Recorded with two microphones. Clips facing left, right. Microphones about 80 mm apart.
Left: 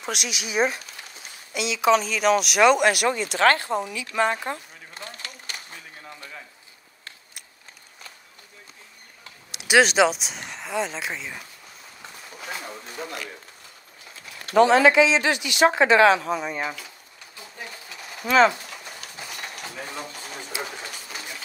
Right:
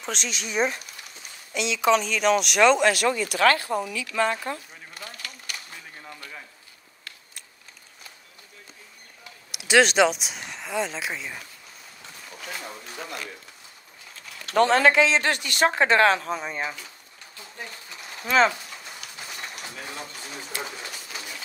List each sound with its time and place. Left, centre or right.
0.0 s speech: centre
3.3 s a sound: left
9.7 s speech: centre
14.6 s speech: right
16.3 s speech: left